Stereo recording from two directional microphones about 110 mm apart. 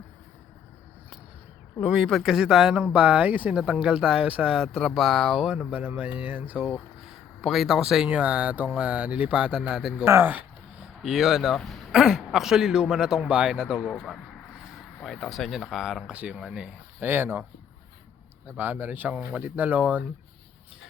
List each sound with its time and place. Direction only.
1.8 s speech: centre (ahead or behind)
10.1 s a sound: 20° right (ahead or behind)
11.0 s a man's voice: 5° right (ahead or behind)
13.7 s a man's voice: 10° left (ahead or behind); by 17.4 s 20° right (ahead or behind)
18.4 s speech: 15° right (ahead or behind)